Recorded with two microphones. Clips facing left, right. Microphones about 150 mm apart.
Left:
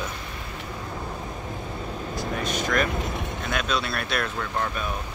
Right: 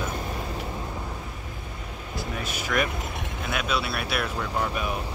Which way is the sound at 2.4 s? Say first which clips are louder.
Left 2 dB; 10° right (ahead or behind).